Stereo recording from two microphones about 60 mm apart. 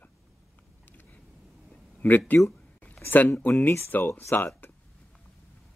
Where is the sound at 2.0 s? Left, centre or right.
Left.